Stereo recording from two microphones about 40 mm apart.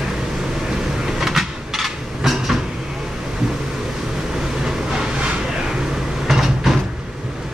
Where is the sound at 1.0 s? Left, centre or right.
Centre.